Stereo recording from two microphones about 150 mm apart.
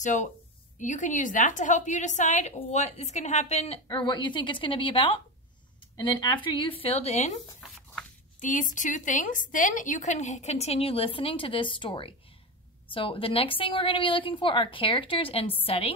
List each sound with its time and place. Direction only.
0.0 s a woman's voice: 55° left (ahead or behind)
3.8 s a woman's voice: 30° left (ahead or behind); by 7.3 s 45° left (ahead or behind)
8.4 s a woman's voice: 60° left (ahead or behind); by 15.9 s 40° left (ahead or behind)